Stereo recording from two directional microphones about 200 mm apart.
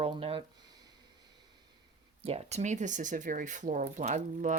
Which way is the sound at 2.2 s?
30° right (ahead or behind).